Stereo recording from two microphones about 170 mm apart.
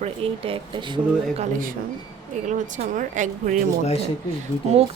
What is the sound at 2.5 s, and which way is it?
A woman's voice, 45° right (ahead or behind).